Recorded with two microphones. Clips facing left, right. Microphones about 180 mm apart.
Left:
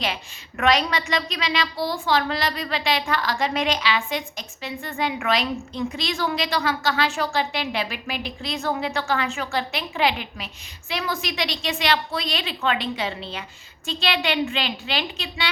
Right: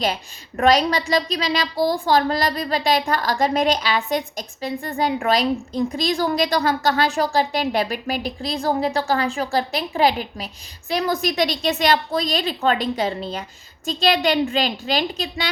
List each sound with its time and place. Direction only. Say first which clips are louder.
0.0 s a woman's voice: right 5 dB; 40° right (ahead or behind)